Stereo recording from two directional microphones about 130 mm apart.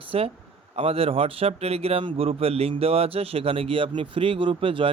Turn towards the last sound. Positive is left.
turn(degrees=-40)  # may be behind; listen again after turning